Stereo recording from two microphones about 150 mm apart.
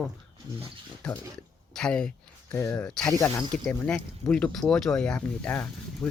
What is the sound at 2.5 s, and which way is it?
Speech, 20° left (ahead or behind).